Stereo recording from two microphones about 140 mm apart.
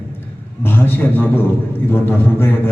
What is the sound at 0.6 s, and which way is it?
A man's voice, 15° left (ahead or behind).